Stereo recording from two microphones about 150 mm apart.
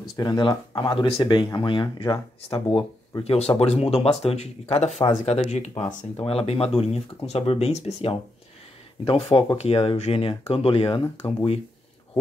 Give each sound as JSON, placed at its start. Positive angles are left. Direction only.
{"t": 0.1, "sound": "speech", "side_deg": 30}